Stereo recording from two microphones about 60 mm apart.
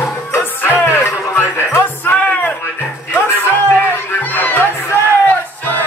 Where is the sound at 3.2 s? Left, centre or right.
Left.